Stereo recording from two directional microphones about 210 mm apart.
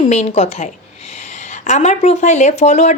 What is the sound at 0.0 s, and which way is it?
Speech, 30° left (ahead or behind).